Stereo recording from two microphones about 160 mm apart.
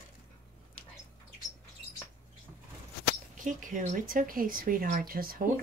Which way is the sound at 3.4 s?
55° right (ahead or behind).